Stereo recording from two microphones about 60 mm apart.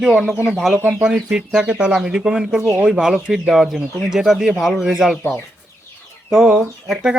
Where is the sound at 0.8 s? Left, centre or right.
Right.